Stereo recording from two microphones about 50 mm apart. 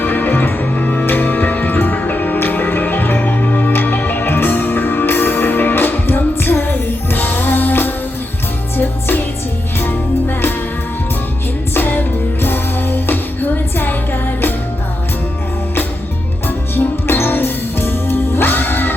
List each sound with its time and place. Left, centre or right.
0.0 s music: left
11.7 s music: left
16.7 s music: left